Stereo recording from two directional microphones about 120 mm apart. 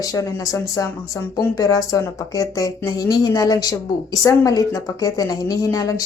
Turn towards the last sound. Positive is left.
turn(degrees=30)  # may be behind; listen again after turning